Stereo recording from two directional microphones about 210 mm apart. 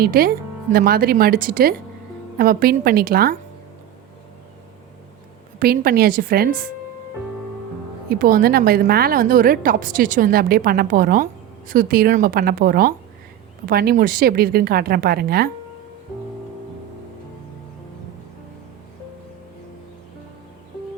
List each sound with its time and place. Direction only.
0.0 s a woman's voice: 45° right (ahead or behind)
5.5 s a woman's voice: 45° right (ahead or behind)
8.1 s a woman's voice: 45° right (ahead or behind)